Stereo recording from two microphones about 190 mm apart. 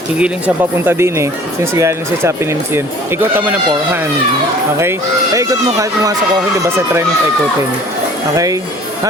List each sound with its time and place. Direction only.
0.2 s speech: 10° right (ahead or behind)
4.8 s speech: 15° right (ahead or behind)